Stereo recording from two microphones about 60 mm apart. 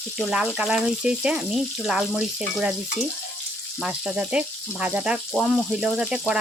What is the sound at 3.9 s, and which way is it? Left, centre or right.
Speech, centre.